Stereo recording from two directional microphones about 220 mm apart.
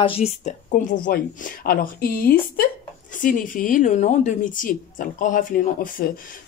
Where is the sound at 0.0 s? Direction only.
25° left (ahead or behind).